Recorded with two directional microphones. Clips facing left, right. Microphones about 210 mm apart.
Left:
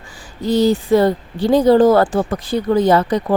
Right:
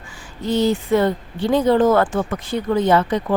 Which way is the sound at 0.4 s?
35° left (ahead or behind).